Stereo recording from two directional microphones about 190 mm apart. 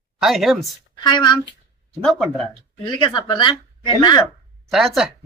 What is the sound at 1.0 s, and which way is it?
Speech, 25° left (ahead or behind).